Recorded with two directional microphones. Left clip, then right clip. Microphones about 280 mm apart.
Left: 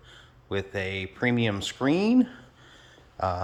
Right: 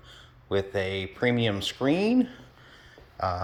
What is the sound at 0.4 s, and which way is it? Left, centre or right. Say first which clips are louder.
Speech: right 3 dB; centre.